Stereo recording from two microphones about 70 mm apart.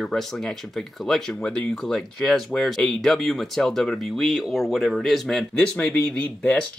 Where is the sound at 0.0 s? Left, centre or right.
Centre.